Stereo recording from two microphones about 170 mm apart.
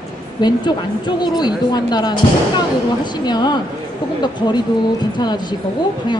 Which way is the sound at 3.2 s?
25° left (ahead or behind).